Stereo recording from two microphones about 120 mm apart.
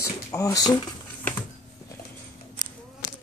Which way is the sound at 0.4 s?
30° left (ahead or behind).